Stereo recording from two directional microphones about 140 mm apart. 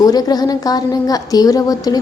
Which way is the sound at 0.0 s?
25° left (ahead or behind).